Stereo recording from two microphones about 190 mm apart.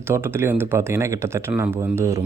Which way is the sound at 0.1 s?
10° right (ahead or behind).